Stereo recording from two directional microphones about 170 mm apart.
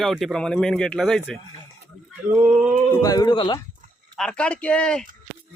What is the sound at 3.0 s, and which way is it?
Speech, 20° left (ahead or behind).